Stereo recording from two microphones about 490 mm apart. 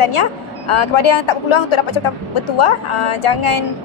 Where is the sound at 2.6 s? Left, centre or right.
Left.